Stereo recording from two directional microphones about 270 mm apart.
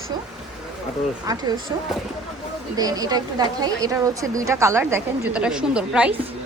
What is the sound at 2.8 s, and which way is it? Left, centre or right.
A woman's voice, centre.